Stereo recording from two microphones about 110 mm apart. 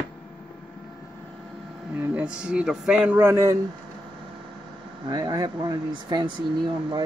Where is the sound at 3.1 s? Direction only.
25° right (ahead or behind).